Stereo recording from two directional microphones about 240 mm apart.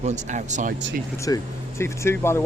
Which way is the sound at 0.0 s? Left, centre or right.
Right.